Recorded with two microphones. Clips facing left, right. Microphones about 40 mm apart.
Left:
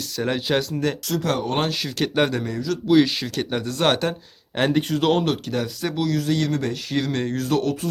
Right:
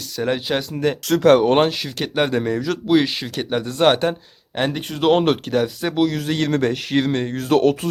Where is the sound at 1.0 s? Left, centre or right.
Right.